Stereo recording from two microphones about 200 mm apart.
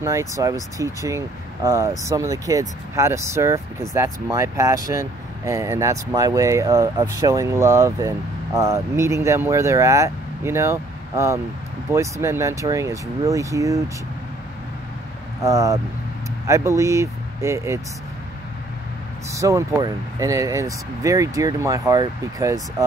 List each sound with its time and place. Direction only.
0.0 s speech: 15° right (ahead or behind)
15.4 s speech: 15° right (ahead or behind)
19.3 s speech: 15° right (ahead or behind)